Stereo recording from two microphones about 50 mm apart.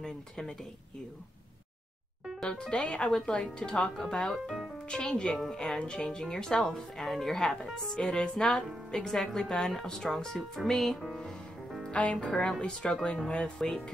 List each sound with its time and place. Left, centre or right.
0.0 s speech: centre
2.4 s speech: centre
12.1 s speech: centre